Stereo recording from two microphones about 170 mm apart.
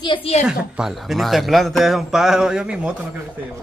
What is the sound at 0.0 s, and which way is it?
Speech, 30° left (ahead or behind).